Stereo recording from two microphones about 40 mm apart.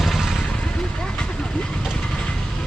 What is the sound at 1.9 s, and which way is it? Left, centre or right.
Train, centre.